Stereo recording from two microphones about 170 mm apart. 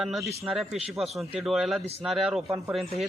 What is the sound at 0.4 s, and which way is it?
Speech, centre (ahead or behind).